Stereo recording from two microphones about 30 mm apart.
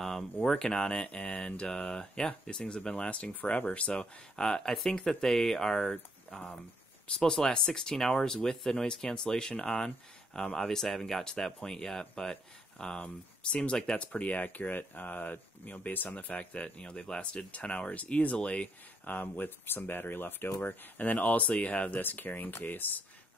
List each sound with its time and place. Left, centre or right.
0.4 s speech: centre
3.4 s speech: left
4.0 s speech: left
13.0 s speech: left
13.9 s speech: left
16.3 s speech: left
16.6 s speech: left
18.4 s speech: left
19.0 s speech: left
21.2 s speech: left
21.9 s speech: left